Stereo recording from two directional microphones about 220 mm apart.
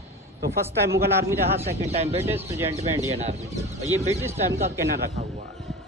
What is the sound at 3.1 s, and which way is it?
Speech, 30° right (ahead or behind).